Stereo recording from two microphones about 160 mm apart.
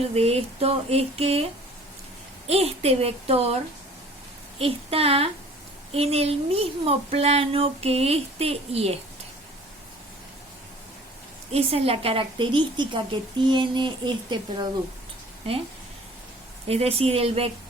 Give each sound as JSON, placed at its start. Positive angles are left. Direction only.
{"t": 0.1, "sound": "speech", "side_deg": -40}
{"t": 2.5, "sound": "speech", "side_deg": -40}
{"t": 4.6, "sound": "speech", "side_deg": -40}
{"t": 11.5, "sound": "speech", "side_deg": -40}
{"t": 16.6, "sound": "speech", "side_deg": -40}